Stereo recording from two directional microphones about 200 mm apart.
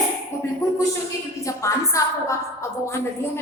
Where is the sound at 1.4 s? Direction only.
15° left (ahead or behind).